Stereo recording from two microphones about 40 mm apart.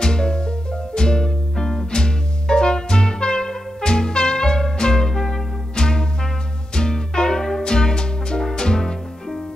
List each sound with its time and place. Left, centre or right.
0.0 s music: left